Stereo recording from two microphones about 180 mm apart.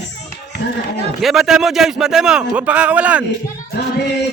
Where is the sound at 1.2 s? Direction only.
Centre (ahead or behind).